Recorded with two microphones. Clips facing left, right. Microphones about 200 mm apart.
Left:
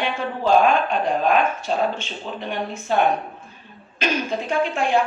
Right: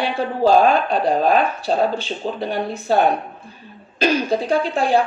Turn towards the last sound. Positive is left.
turn(degrees=-35)  # may be behind; listen again after turning